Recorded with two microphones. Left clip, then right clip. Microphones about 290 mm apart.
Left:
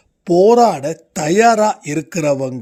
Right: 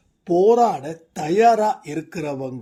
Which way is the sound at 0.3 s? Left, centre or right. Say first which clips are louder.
Left 5 dB; left.